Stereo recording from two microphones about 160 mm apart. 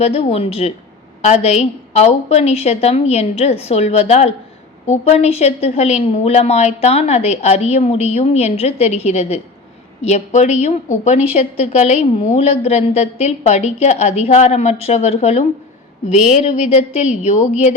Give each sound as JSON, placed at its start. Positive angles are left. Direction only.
{"t": 0.0, "sound": "a woman's voice", "side_deg": 40}